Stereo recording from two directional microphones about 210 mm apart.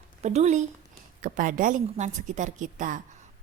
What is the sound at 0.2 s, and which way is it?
A woman's voice, 30° right (ahead or behind).